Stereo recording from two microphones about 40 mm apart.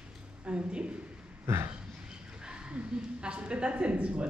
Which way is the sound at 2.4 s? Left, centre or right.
Right.